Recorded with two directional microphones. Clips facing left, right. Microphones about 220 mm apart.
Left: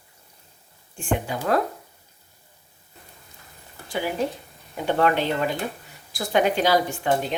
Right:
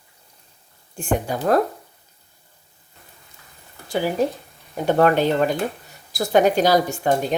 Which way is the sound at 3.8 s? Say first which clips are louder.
Right 5 dB; 40° right (ahead or behind).